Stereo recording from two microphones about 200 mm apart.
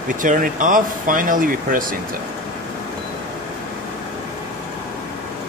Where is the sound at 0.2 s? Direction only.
40° right (ahead or behind).